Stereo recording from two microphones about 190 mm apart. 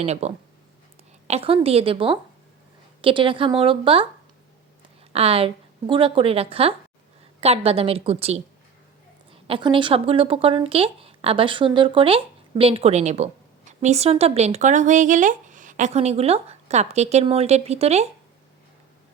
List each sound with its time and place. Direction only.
0.0 s a woman's voice: 35° right (ahead or behind)
5.1 s a woman's voice: 30° right (ahead or behind)